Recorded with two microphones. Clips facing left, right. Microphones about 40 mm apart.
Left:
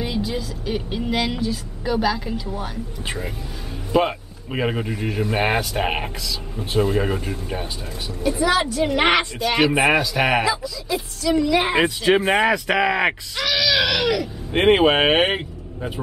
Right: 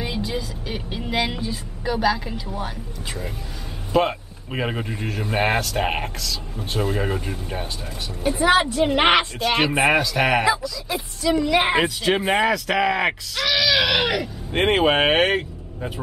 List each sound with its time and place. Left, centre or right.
0.0 s speech: centre
1.9 s speech: centre
3.9 s speech: centre
8.4 s speech: right; by 9.7 s centre
9.7 s speech: centre
11.7 s speech: centre
12.4 s speech: centre
13.9 s speech: right
14.5 s speech: centre